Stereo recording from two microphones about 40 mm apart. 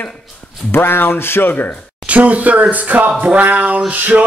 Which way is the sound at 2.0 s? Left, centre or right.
Right.